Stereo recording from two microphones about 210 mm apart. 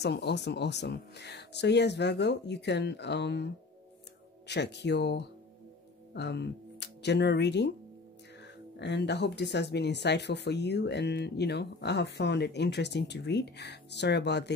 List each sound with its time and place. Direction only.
0.0 s speech: 50° left (ahead or behind)
8.7 s speech: 55° left (ahead or behind)